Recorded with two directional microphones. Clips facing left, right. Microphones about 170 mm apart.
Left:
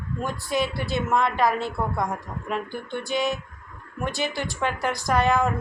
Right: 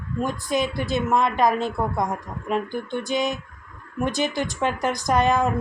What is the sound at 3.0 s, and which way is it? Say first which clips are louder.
A woman's voice: left 2 dB; 20° right (ahead or behind).